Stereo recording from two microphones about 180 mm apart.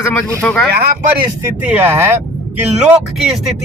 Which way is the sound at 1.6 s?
10° right (ahead or behind).